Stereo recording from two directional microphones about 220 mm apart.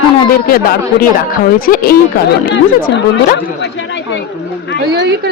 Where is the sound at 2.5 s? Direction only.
50° left (ahead or behind).